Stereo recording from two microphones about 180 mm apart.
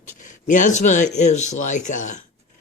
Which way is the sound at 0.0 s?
45° left (ahead or behind).